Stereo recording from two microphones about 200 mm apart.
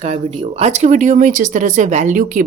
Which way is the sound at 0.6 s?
35° right (ahead or behind).